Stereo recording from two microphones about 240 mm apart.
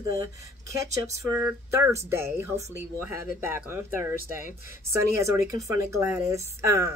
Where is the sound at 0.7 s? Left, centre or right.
Centre.